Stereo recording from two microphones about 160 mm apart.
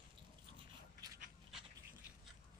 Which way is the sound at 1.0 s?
25° right (ahead or behind).